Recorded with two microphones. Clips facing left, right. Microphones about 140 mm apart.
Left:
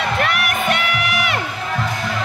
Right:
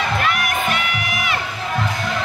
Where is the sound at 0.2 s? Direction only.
65° left (ahead or behind).